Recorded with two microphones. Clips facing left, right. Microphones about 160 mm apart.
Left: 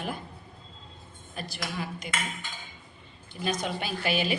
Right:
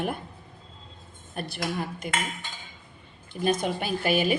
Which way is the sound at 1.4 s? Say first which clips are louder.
Right 5 dB; 55° right (ahead or behind).